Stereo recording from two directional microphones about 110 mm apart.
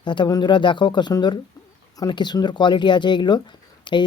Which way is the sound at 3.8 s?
45° left (ahead or behind).